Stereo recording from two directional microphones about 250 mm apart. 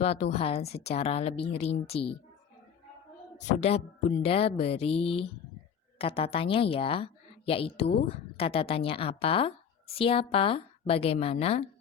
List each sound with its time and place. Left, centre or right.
0.0 s speech: left
3.3 s a child's voice: left